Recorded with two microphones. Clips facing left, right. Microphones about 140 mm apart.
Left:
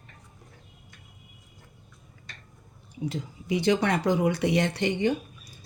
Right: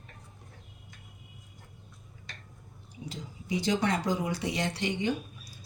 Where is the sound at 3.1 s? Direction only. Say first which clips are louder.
Left 4 dB; 60° left (ahead or behind).